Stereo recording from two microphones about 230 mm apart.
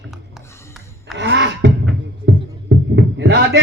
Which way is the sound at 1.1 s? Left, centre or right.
Right.